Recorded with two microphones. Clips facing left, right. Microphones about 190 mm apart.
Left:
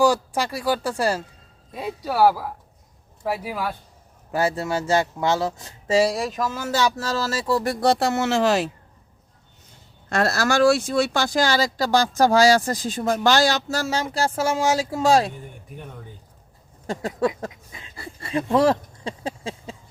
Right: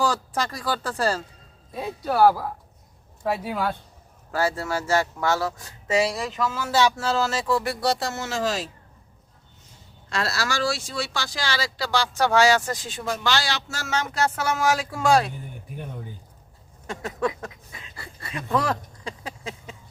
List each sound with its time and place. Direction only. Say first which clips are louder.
0.0 s speech: left 5 dB; 10° left (ahead or behind)
4.3 s speech: left 2 dB; 20° left (ahead or behind)
6.3 s speech: right 1 dB; 45° left (ahead or behind)
7.8 s speech: left 6 dB; 60° left (ahead or behind)
10.1 s speech: left 6 dB; 50° left (ahead or behind); by 15.3 s 25° left (ahead or behind)
16.8 s speech: left 4 dB; 35° left (ahead or behind)